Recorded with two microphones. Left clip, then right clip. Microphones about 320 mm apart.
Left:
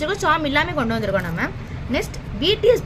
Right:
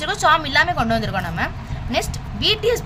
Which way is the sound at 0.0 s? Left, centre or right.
Right.